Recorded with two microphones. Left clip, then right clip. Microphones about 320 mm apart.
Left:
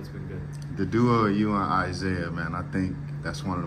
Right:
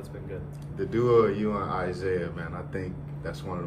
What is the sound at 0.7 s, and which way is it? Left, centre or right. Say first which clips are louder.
Speech: right 2 dB; left.